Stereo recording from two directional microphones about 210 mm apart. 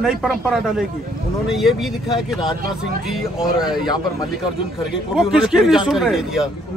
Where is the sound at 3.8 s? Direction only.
20° left (ahead or behind).